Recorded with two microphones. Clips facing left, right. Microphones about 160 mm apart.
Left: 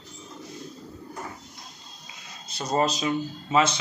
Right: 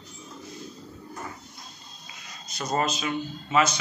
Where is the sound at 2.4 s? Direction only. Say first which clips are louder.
Left 2 dB; 30° left (ahead or behind).